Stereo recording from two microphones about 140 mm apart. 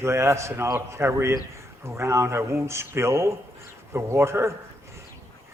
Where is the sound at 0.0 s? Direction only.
20° right (ahead or behind).